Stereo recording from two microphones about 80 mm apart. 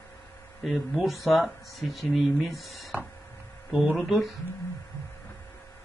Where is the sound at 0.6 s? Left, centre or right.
Centre.